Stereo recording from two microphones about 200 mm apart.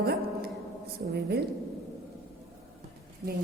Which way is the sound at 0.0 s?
50° right (ahead or behind).